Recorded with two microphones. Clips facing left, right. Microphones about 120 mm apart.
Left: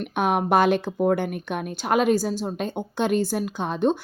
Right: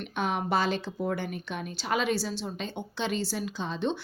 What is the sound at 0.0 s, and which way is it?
Speech, 55° left (ahead or behind).